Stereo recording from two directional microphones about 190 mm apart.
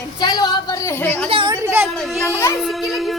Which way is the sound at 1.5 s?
15° right (ahead or behind).